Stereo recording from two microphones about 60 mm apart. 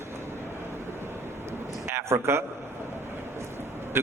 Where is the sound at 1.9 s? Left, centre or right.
Right.